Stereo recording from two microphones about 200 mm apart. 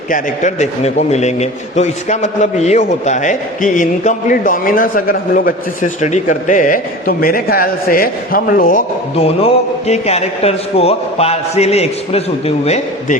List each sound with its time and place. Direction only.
0.1 s a man's voice: 35° left (ahead or behind)